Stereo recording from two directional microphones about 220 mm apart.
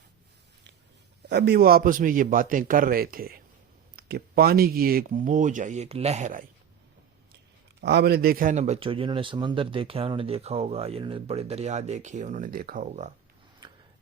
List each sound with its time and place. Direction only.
1.3 s speech: 45° right (ahead or behind); by 6.4 s 30° right (ahead or behind)
7.8 s speech: 50° right (ahead or behind)